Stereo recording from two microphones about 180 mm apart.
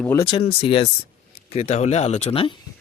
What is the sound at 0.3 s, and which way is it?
Speech, 30° left (ahead or behind).